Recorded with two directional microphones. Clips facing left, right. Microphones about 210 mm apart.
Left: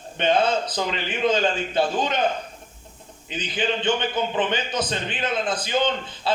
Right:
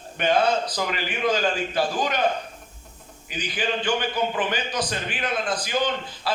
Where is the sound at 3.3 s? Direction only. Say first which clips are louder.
Left 2 dB; 20° left (ahead or behind).